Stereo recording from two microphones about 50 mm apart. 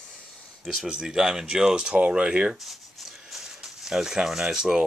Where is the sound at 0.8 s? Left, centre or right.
Centre.